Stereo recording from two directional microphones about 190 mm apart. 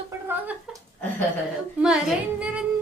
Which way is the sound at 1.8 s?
5° right (ahead or behind).